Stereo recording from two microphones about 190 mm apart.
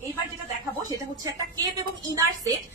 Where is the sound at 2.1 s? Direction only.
15° right (ahead or behind).